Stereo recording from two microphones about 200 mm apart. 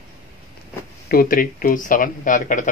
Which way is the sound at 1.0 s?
45° left (ahead or behind).